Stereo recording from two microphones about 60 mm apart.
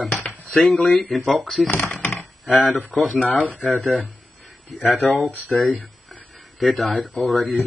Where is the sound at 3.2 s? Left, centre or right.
Left.